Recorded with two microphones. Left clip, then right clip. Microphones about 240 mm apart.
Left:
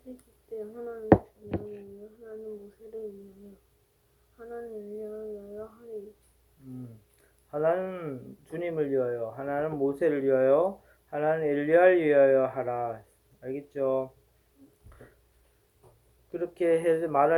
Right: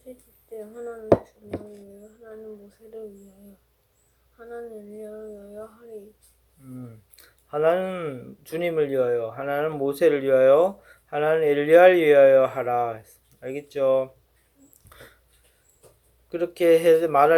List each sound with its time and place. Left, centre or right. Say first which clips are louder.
4.4 s a sound: right 2 dB; centre
7.2 s speech: right 6 dB; right
16.3 s speech: right 7 dB; right